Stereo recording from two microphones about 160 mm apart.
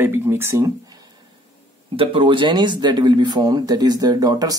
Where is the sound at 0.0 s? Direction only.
15° right (ahead or behind).